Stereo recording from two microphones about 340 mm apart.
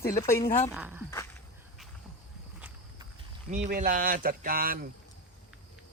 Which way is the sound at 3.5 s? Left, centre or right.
Right.